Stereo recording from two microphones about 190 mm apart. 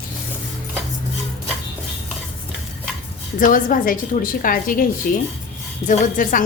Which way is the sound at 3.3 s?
45° left (ahead or behind).